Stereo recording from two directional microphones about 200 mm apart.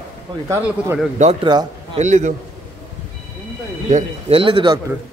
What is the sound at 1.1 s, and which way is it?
Speech, 35° right (ahead or behind).